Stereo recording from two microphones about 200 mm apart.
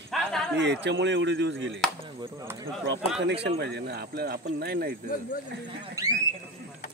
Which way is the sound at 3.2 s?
60° right (ahead or behind).